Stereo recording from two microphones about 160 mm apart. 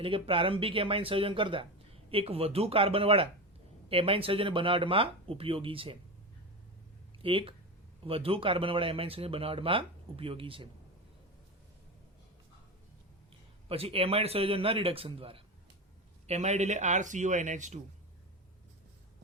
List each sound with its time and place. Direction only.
0.0 s speech: 35° right (ahead or behind)
7.2 s speech: 35° right (ahead or behind)
13.7 s speech: 35° right (ahead or behind)